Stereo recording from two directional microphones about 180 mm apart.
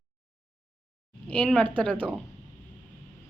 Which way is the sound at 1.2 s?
5° left (ahead or behind).